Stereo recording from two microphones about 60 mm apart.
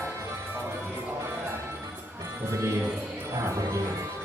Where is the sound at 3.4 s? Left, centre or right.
Right.